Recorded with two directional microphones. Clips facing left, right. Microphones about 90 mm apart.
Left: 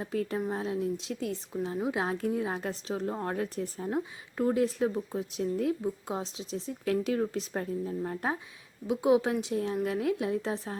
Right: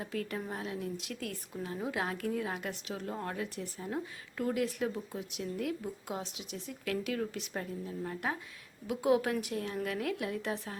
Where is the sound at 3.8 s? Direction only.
30° left (ahead or behind).